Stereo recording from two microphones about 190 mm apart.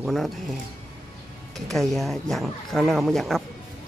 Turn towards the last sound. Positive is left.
turn(degrees=0)  # may be behind; listen again after turning